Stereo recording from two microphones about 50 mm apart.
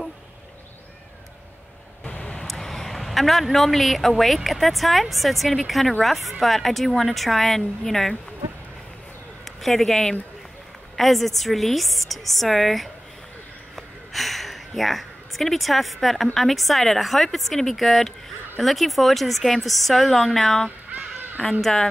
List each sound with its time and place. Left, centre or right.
2.0 s vehicle: centre
2.4 s a man's voice: centre
9.4 s a man's voice: centre
13.7 s a sound: centre
16.3 s a man's voice: centre